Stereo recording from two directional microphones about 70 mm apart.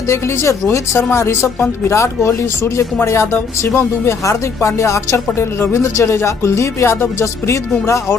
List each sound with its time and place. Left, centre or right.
0.1 s speech: left